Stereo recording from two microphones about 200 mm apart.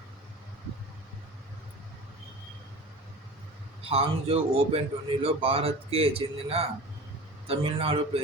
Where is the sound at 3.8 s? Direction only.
30° right (ahead or behind).